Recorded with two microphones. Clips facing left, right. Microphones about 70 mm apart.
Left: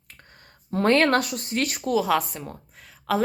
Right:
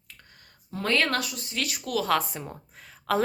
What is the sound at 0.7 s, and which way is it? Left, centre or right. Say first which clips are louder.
Speech: left 7 dB; left.